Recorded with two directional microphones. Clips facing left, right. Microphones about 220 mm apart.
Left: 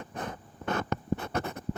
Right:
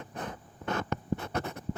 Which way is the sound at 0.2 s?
55° left (ahead or behind).